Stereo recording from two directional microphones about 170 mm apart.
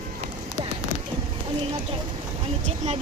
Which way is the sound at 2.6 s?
40° right (ahead or behind).